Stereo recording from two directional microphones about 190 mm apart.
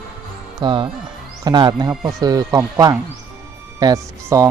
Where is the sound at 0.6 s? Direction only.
25° right (ahead or behind).